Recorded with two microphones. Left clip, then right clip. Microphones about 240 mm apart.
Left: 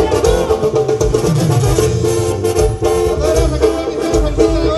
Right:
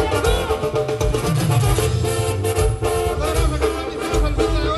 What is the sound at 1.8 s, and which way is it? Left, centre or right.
Music, centre.